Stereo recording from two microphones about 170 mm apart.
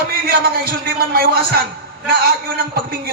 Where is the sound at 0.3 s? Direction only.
60° right (ahead or behind).